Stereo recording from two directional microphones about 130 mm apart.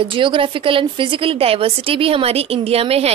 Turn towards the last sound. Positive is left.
turn(degrees=-50)  # may be behind; listen again after turning